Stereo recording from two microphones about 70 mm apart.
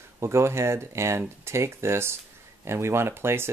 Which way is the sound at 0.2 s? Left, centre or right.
Right.